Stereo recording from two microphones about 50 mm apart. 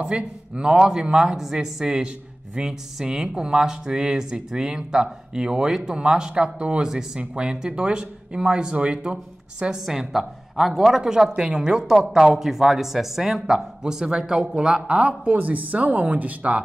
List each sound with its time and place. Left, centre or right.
0.0 s speech: centre
9.8 s speech: centre; by 16.6 s right